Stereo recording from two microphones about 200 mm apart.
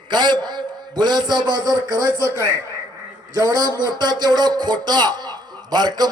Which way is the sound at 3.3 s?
20° right (ahead or behind).